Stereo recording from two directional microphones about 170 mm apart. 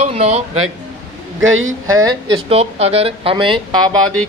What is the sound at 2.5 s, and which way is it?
Speech, 35° right (ahead or behind).